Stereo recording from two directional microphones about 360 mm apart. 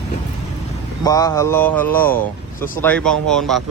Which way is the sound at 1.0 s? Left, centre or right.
Centre.